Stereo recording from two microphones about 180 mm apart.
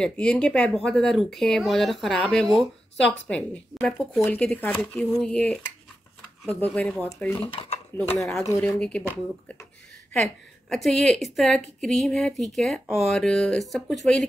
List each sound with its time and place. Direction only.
0.0 s speech: 5° left (ahead or behind)
7.3 s speech: 30° left (ahead or behind)
8.4 s speech: 15° left (ahead or behind)
8.6 s speech: 5° left (ahead or behind)
10.7 s speech: centre (ahead or behind)